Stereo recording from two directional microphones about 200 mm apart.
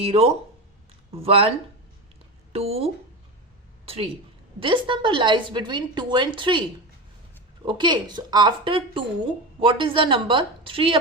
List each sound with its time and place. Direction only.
0.0 s a woman's voice: 30° right (ahead or behind)